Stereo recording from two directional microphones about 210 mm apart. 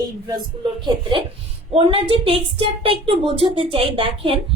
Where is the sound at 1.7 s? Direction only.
25° right (ahead or behind).